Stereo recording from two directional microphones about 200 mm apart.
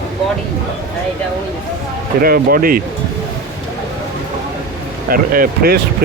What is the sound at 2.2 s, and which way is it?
Speech, 45° right (ahead or behind).